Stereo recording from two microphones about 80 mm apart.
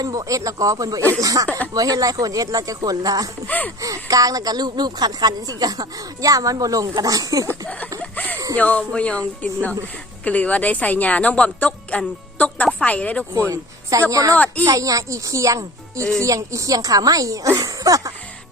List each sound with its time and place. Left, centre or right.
0.0 s a woman's voice: right
1.5 s speech: left
1.7 s a woman's voice: right
3.4 s speech: centre
3.8 s a woman's voice: right
8.1 s a sound: left
8.5 s a woman's voice: centre
14.1 s a woman's voice: right
14.3 s speech: centre
14.6 s a woman's voice: right